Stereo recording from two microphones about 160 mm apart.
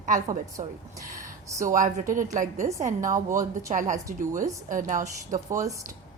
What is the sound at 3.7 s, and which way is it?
A woman's voice, 50° right (ahead or behind).